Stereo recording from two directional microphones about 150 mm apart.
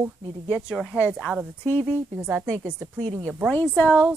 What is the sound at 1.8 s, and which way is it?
Speech, 15° right (ahead or behind).